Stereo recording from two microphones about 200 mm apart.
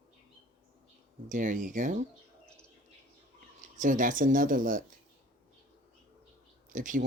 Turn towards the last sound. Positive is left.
turn(degrees=-40)  # may be behind; listen again after turning